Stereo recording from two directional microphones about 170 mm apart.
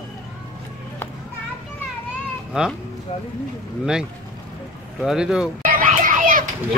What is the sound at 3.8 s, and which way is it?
Speech, 5° right (ahead or behind).